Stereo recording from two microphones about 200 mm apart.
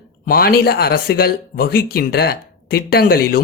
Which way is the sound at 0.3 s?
50° left (ahead or behind).